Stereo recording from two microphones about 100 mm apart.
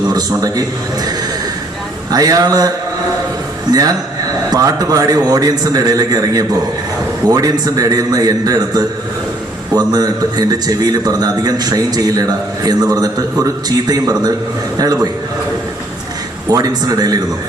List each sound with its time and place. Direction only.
0.1 s a man's voice: 40° right (ahead or behind)
2.0 s a man's voice: 35° right (ahead or behind)
3.7 s a man's voice: 40° right (ahead or behind)
16.5 s a man's voice: 40° right (ahead or behind)